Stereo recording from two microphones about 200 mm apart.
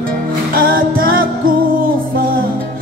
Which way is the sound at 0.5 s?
45° right (ahead or behind).